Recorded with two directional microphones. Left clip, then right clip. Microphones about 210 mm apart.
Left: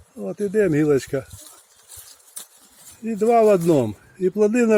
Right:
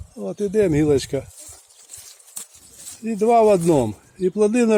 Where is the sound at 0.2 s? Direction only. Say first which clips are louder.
Right 1 dB; 15° right (ahead or behind).